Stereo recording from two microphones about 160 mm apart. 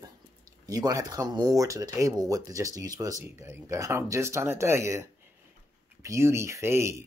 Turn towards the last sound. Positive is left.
turn(degrees=-15)  # may be behind; listen again after turning